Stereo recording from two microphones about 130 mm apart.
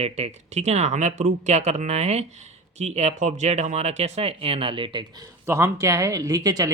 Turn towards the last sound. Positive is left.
turn(degrees=-30)  # may be behind; listen again after turning